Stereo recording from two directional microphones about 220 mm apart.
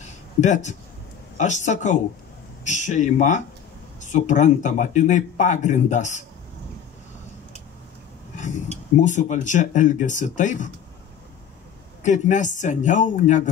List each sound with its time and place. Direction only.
0.0 s a sound: 35° left (ahead or behind)
1.4 s speech: 35° left (ahead or behind)
8.9 s speech: 35° left (ahead or behind)
12.0 s speech: 35° left (ahead or behind)